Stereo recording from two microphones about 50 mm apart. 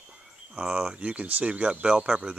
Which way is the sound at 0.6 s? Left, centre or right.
Centre.